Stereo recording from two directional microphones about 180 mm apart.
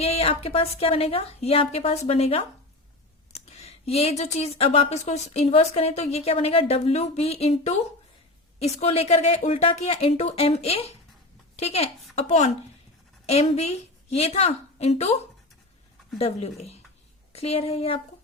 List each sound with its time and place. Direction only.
0.0 s speech: 35° left (ahead or behind)